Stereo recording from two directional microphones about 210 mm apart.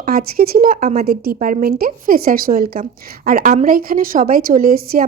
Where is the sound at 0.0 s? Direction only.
45° right (ahead or behind).